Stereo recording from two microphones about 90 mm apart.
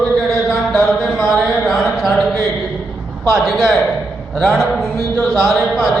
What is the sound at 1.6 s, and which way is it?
Speech, centre (ahead or behind).